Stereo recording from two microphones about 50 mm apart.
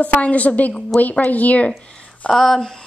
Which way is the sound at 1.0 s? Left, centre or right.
Left.